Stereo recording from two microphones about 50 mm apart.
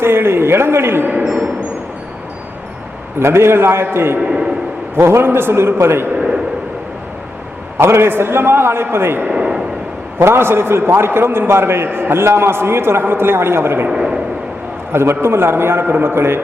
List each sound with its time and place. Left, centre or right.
0.0 s a man's voice: right
1.0 s speech: right
3.2 s a man's voice: right
7.8 s a man's voice: right
9.3 s a sound: centre
10.2 s a man's voice: right
13.9 s a sound: centre
14.9 s a man's voice: right